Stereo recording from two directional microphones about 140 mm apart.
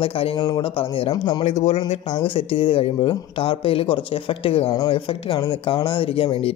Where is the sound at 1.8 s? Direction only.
40° left (ahead or behind).